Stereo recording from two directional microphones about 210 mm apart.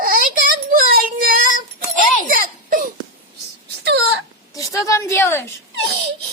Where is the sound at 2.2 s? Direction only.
40° right (ahead or behind).